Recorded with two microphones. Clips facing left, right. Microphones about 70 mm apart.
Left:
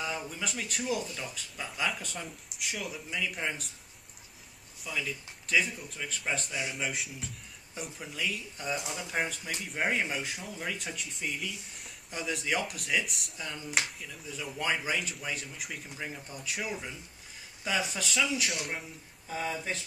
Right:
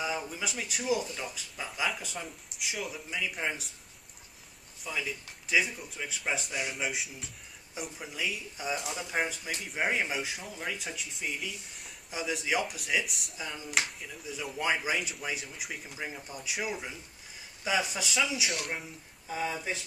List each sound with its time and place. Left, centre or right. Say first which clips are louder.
0.0 s speech: right 2 dB; centre
4.8 s speech: even; centre